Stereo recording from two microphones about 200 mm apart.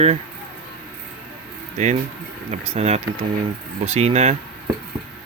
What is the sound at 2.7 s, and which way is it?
Speech, 30° right (ahead or behind).